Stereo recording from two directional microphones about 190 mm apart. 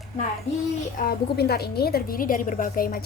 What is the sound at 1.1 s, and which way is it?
A woman's voice, 55° left (ahead or behind).